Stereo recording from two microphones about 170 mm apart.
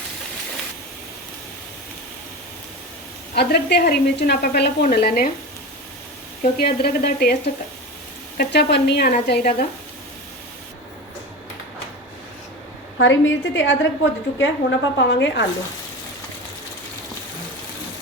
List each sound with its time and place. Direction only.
3.3 s a woman's voice: 70° left (ahead or behind)
6.4 s a woman's voice: 65° left (ahead or behind)
13.0 s a woman's voice: 90° left